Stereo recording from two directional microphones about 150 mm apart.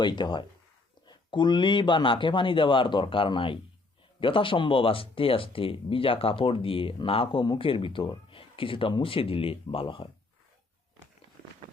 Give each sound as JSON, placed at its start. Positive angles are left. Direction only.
{"t": 0.0, "sound": "speech", "side_deg": 30}